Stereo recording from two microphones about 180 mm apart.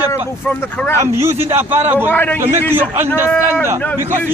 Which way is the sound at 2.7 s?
10° right (ahead or behind).